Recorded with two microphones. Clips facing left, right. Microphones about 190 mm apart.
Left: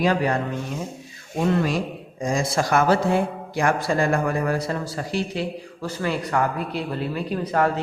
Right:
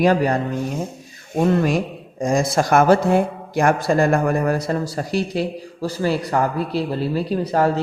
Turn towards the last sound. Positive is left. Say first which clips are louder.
# right 3 dB
turn(degrees=-30)  # may be behind; listen again after turning